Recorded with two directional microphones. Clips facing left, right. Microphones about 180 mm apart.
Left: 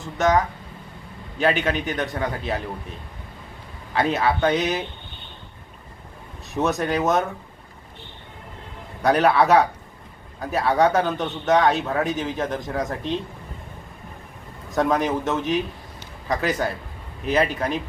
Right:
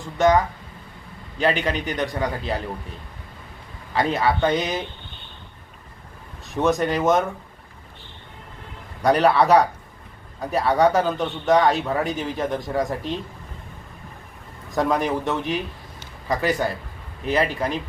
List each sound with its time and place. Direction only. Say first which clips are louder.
0.0 s speech: right 2 dB; centre (ahead or behind)
3.9 s speech: even; centre (ahead or behind)
6.5 s speech: right 2 dB; centre (ahead or behind)
9.0 s speech: right 1 dB; centre (ahead or behind)
14.7 s speech: left 1 dB; centre (ahead or behind)